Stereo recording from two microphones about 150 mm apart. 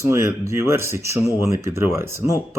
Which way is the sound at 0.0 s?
20° right (ahead or behind).